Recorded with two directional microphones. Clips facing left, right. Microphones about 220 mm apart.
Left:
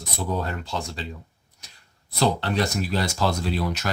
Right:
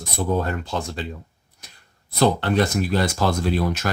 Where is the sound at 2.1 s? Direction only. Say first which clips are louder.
Right 4 dB; 50° right (ahead or behind).